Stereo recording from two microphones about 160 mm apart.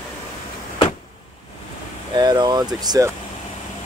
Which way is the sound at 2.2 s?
25° right (ahead or behind).